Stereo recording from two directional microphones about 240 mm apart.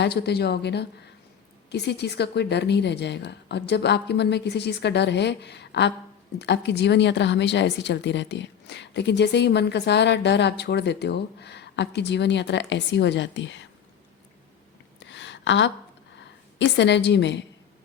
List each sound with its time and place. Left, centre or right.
0.0 s a woman's voice: left
14.9 s a sound: left
16.1 s a woman's voice: left